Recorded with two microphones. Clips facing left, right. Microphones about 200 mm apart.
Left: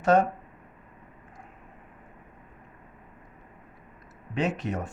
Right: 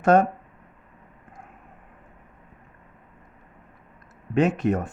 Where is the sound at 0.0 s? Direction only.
50° right (ahead or behind).